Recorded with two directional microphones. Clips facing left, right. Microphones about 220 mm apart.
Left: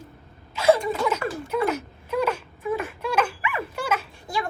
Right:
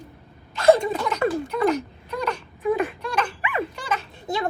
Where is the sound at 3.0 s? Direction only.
5° left (ahead or behind).